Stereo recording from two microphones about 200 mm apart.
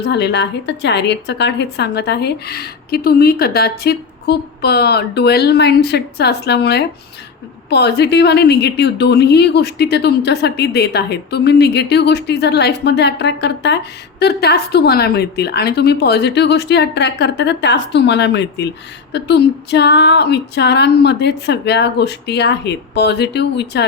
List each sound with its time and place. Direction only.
0.0 s a woman's voice: 55° left (ahead or behind)